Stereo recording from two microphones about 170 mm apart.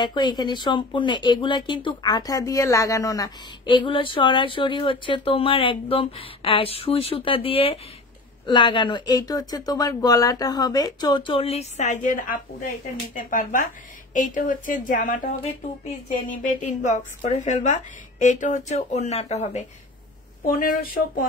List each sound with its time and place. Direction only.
0.0 s a woman's voice: 25° left (ahead or behind); by 15.3 s 50° left (ahead or behind)
16.8 s a woman's voice: 45° left (ahead or behind)
20.5 s speech: 55° left (ahead or behind)